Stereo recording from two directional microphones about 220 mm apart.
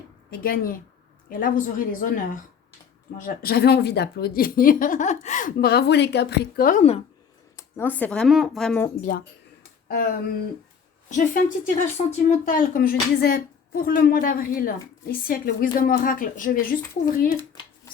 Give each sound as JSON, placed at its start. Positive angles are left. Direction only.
{"t": 0.3, "sound": "a woman's voice", "side_deg": 40}
{"t": 7.5, "sound": "speech", "side_deg": 10}
{"t": 9.0, "sound": "a woman's voice", "side_deg": 40}